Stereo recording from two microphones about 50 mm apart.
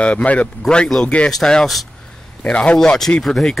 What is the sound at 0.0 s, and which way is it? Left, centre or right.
Speech, left.